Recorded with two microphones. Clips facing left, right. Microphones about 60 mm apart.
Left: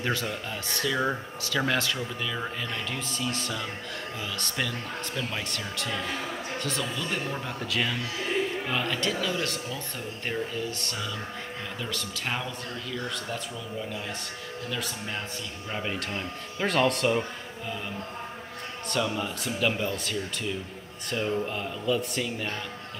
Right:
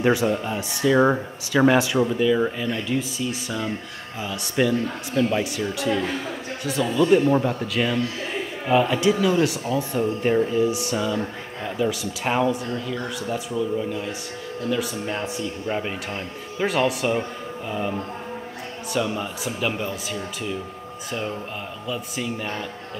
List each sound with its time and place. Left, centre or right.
0.0 s a man's voice: centre
8.6 s speech: centre
12.3 s speech: centre
17.6 s speech: centre
18.9 s a man's voice: centre